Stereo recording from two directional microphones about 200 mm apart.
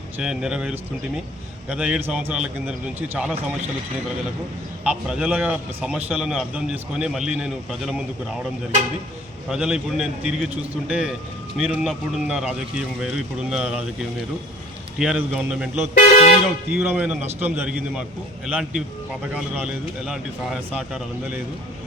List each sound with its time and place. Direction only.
0.2 s a man's voice: 5° right (ahead or behind)
4.8 s a man's voice: 5° right (ahead or behind)
9.5 s a man's voice: 5° right (ahead or behind)
14.9 s a man's voice: 5° right (ahead or behind)
16.2 s speech: 55° left (ahead or behind)
16.9 s a man's voice: 5° right (ahead or behind)